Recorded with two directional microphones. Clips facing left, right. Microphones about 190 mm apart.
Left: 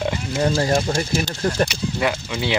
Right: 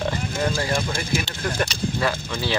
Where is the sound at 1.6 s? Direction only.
15° left (ahead or behind).